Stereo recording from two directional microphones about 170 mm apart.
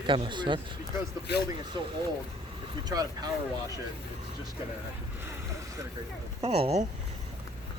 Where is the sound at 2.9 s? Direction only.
20° right (ahead or behind).